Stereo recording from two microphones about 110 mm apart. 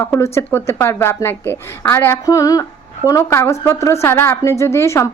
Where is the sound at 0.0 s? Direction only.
25° left (ahead or behind).